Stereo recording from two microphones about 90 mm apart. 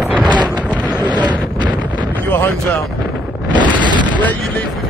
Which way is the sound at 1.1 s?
55° right (ahead or behind).